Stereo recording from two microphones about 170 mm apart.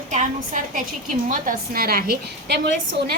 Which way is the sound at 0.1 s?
45° right (ahead or behind).